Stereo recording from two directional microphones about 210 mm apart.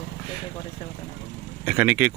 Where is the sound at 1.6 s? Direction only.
5° right (ahead or behind).